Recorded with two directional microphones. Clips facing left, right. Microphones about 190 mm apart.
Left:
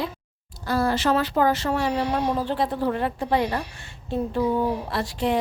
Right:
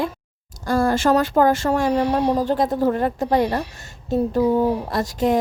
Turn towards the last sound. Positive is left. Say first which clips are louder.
# right 5 dB
turn(degrees=-45)  # may be behind; listen again after turning